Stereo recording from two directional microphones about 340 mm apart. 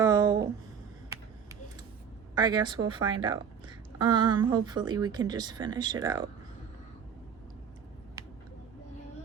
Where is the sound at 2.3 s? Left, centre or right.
Centre.